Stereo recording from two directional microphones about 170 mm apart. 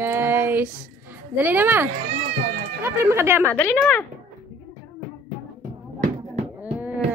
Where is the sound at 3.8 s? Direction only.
10° left (ahead or behind).